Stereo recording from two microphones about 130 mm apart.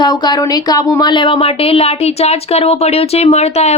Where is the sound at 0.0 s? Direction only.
30° left (ahead or behind).